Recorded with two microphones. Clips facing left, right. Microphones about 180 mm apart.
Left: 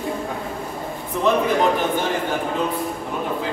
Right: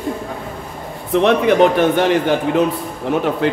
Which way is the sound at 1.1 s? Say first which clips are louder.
Right 6 dB; 75° right (ahead or behind).